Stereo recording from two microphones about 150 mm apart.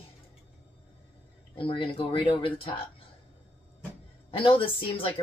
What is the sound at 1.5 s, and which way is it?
Speech, 35° left (ahead or behind).